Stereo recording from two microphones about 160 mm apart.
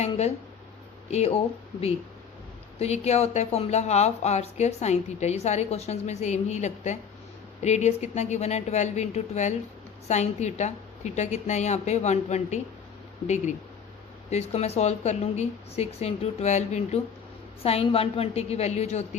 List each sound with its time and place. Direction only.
0.0 s a woman's voice: 40° left (ahead or behind)
2.7 s a woman's voice: 40° left (ahead or behind)